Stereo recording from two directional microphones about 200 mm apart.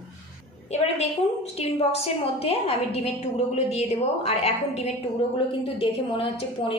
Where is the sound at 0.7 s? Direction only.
30° left (ahead or behind).